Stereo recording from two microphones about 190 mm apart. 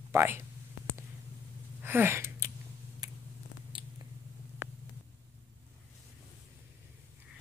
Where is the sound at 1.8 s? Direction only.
10° right (ahead or behind).